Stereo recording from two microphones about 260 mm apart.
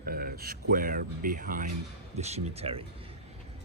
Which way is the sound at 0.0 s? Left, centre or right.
Right.